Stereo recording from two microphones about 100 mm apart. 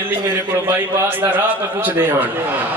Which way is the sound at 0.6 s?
20° right (ahead or behind).